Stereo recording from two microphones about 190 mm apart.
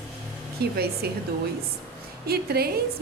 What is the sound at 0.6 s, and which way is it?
Speech, 55° right (ahead or behind).